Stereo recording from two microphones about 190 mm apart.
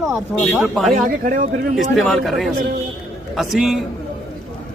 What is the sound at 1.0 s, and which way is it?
Speech, 45° right (ahead or behind).